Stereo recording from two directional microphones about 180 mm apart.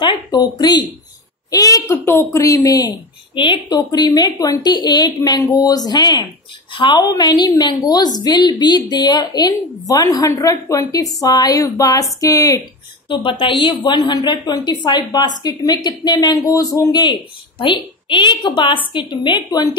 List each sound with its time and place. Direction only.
0.0 s a woman's voice: 25° left (ahead or behind)